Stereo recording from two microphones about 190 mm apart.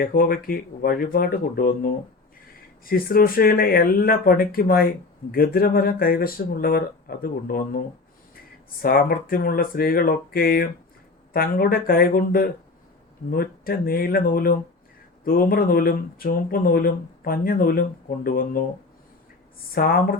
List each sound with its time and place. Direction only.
0.0 s speech: 50° left (ahead or behind)
19.7 s speech: 50° left (ahead or behind)